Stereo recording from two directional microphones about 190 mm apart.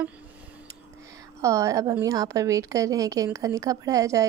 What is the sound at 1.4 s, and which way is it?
A woman's voice, 15° right (ahead or behind).